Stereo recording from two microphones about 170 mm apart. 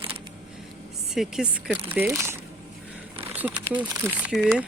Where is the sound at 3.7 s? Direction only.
10° right (ahead or behind).